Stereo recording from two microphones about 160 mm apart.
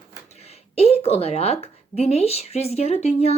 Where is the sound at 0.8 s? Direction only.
40° left (ahead or behind).